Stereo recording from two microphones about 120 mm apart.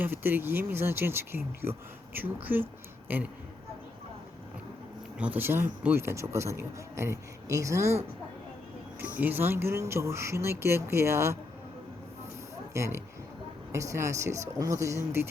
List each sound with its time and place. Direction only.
0.0 s speech: 15° right (ahead or behind)
5.1 s speech: 10° right (ahead or behind)
9.1 s speech: 15° right (ahead or behind)
12.7 s speech: 25° right (ahead or behind)